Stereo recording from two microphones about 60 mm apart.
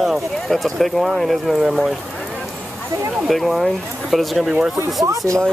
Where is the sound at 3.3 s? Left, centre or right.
Centre.